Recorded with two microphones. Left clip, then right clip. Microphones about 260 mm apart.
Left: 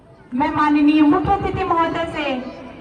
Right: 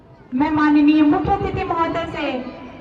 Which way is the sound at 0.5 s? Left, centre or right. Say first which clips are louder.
Right 1 dB; left.